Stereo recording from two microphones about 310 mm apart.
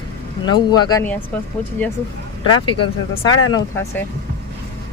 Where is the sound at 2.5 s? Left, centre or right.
Centre.